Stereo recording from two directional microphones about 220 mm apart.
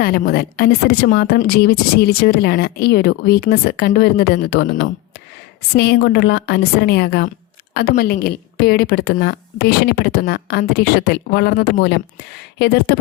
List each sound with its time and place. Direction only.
0.0 s a woman's voice: 45° left (ahead or behind)